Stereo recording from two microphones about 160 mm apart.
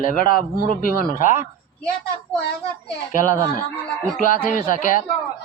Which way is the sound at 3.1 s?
55° left (ahead or behind).